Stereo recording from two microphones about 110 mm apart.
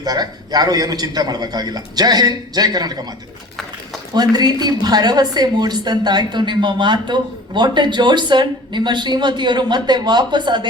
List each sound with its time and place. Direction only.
0.0 s a man's voice: 35° right (ahead or behind)
4.1 s a woman's voice: 40° right (ahead or behind)